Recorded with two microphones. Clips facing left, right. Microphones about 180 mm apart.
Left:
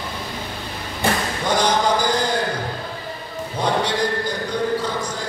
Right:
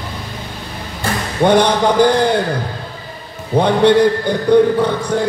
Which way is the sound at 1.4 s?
60° right (ahead or behind).